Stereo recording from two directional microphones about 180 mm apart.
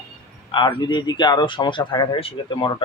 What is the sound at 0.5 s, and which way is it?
Speech, 25° left (ahead or behind).